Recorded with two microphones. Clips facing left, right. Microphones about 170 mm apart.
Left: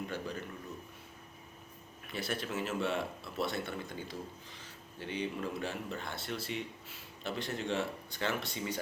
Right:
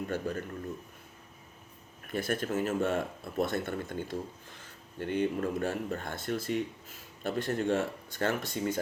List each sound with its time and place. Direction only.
0.1 s speech: 50° right (ahead or behind)
2.0 s speech: 50° right (ahead or behind)